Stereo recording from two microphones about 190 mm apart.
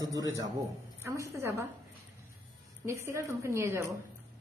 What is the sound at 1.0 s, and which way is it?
Speech, 15° right (ahead or behind).